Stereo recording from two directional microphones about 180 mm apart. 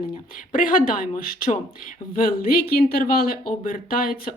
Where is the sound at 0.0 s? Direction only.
50° left (ahead or behind).